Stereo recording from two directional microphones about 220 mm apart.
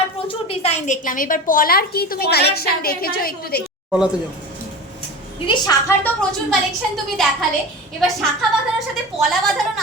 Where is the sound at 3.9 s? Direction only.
5° right (ahead or behind).